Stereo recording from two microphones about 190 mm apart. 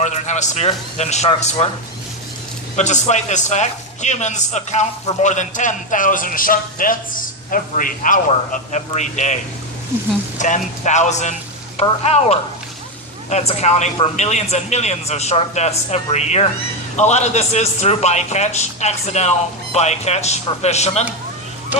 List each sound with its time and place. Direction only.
0.0 s a man's voice: 40° left (ahead or behind)
2.7 s a man's voice: 40° left (ahead or behind)